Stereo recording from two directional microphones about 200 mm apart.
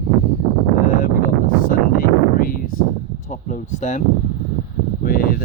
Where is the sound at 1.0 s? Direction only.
45° left (ahead or behind).